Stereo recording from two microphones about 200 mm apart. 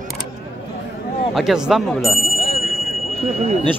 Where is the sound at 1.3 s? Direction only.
Centre (ahead or behind).